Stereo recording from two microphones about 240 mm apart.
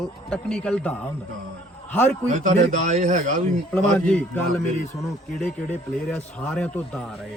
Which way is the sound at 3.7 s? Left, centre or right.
Centre.